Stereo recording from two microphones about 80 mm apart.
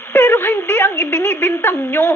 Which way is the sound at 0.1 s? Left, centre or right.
Left.